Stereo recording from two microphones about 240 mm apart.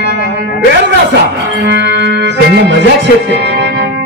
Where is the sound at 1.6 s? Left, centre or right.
Right.